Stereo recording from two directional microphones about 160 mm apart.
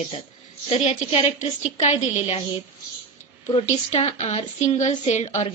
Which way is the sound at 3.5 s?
40° left (ahead or behind).